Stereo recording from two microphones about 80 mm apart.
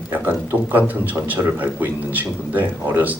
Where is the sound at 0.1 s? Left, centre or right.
Right.